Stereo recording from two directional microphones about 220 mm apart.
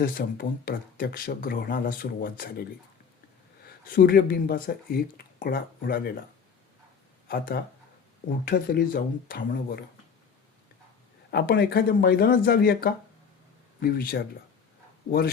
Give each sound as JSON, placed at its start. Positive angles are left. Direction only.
{"t": 0.0, "sound": "speech", "side_deg": 40}
{"t": 3.8, "sound": "speech", "side_deg": 40}
{"t": 7.3, "sound": "speech", "side_deg": 40}
{"t": 11.3, "sound": "speech", "side_deg": 50}